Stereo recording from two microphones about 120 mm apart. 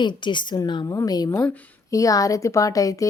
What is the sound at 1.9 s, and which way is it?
Speech, 30° left (ahead or behind).